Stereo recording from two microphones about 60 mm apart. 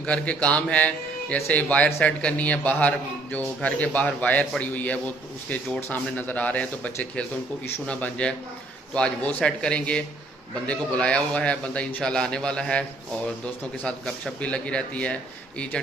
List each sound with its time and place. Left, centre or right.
0.0 s a man's voice: left
14.4 s a man's voice: centre